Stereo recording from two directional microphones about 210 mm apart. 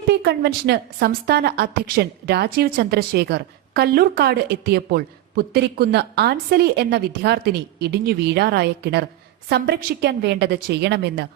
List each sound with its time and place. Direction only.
0.1 s a woman's voice: 50° right (ahead or behind)